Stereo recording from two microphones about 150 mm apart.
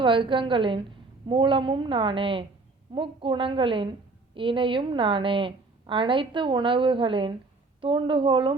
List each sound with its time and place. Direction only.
0.0 s a woman's voice: 35° right (ahead or behind)